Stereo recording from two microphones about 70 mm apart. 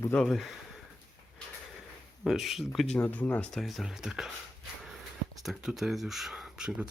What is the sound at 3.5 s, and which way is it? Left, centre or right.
Speech, centre.